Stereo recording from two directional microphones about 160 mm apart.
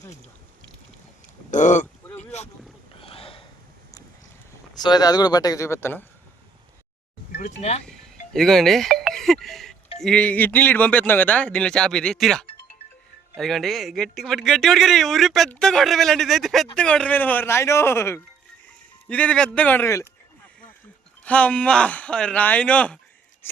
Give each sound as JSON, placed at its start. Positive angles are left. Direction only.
{"t": 1.5, "sound": "speech", "side_deg": 50}
{"t": 2.1, "sound": "boat", "side_deg": 45}
{"t": 3.0, "sound": "a sound", "side_deg": 35}
{"t": 4.7, "sound": "speech", "side_deg": 25}
{"t": 8.3, "sound": "speech", "side_deg": 0}
{"t": 21.2, "sound": "speech", "side_deg": 10}